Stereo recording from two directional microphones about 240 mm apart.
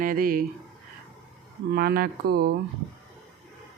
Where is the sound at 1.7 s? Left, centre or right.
Right.